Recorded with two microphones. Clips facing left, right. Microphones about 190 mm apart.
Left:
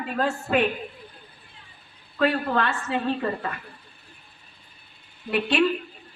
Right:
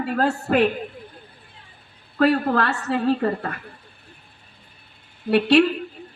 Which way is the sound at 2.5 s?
70° right (ahead or behind).